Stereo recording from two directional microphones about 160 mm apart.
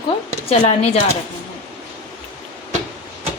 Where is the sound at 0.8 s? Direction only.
40° left (ahead or behind).